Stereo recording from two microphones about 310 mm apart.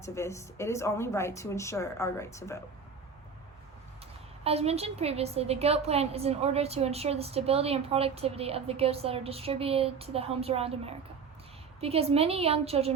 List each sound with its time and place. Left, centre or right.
0.0 s speech: centre
4.4 s a woman's voice: centre